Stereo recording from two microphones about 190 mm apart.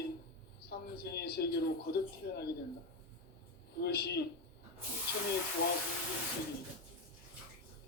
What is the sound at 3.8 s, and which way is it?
Speech, 60° left (ahead or behind).